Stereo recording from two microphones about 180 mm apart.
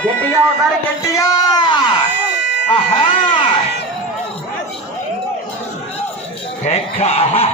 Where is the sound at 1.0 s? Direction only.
20° left (ahead or behind).